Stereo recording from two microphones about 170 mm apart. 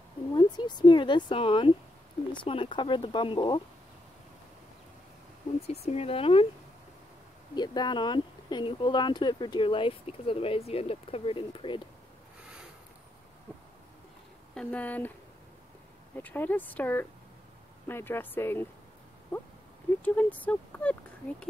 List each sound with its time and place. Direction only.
0.3 s speech: 25° left (ahead or behind)
5.7 s speech: 35° left (ahead or behind)
7.5 s speech: 25° left (ahead or behind)
14.5 s speech: 5° left (ahead or behind)
16.2 s speech: 10° left (ahead or behind)